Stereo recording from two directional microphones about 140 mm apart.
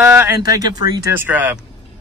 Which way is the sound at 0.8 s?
30° right (ahead or behind).